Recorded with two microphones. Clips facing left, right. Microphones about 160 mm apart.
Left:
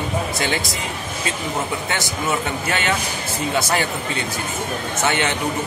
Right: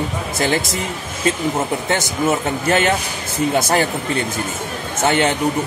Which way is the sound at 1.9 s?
45° right (ahead or behind).